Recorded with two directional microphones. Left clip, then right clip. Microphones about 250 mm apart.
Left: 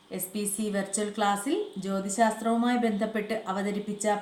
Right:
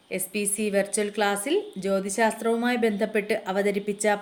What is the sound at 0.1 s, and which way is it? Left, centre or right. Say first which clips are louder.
A woman's voice: right 5 dB; right.